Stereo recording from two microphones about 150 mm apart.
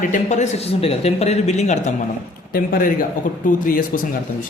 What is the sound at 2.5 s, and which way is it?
Speech, 75° left (ahead or behind).